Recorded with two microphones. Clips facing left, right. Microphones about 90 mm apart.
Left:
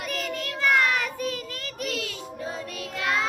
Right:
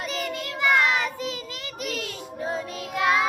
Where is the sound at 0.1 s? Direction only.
20° right (ahead or behind).